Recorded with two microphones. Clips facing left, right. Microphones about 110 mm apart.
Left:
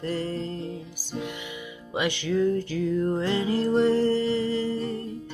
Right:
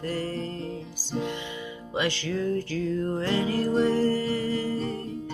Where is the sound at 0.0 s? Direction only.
20° left (ahead or behind).